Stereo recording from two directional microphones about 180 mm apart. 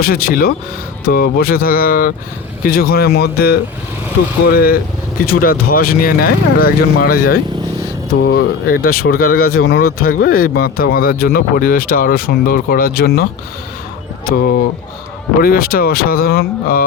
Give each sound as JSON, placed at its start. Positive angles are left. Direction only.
{"t": 0.0, "sound": "speech", "side_deg": 55}
{"t": 15.4, "sound": "speech", "side_deg": 55}